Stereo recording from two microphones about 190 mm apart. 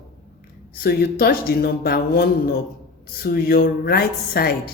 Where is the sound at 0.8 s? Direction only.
55° left (ahead or behind).